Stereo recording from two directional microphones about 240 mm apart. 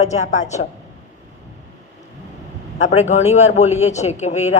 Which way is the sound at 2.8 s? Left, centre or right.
Left.